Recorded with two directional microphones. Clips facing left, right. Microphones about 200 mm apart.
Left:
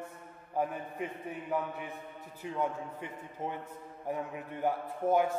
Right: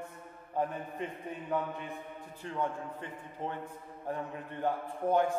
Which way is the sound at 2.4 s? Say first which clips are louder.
Left 1 dB; 10° left (ahead or behind).